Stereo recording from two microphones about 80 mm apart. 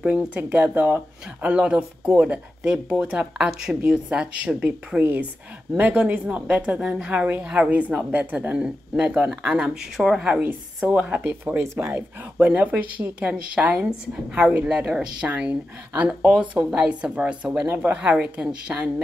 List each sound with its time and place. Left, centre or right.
0.0 s speech: centre
11.6 s speech: right; by 18.9 s centre